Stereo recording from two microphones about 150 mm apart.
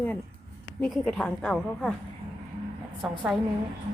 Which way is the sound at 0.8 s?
5° left (ahead or behind).